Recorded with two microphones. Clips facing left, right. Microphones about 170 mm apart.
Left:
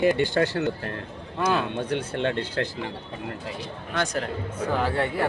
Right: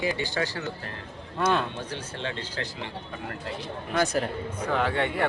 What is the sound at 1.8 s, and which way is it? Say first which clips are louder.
Speech: left 8 dB; 60° left (ahead or behind).